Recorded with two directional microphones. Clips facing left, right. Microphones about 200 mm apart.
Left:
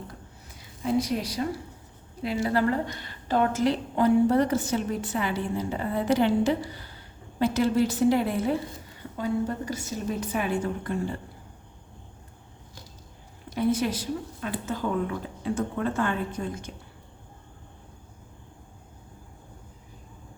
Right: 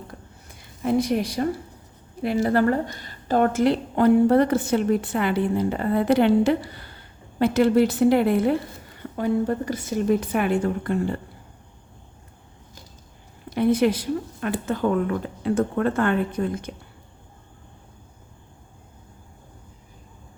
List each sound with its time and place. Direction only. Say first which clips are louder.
0.6 s a woman's voice: right 4 dB; 55° right (ahead or behind)
13.5 s a woman's voice: right 6 dB; 60° right (ahead or behind)